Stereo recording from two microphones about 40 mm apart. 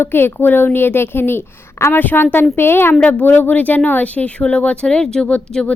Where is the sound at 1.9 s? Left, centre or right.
Left.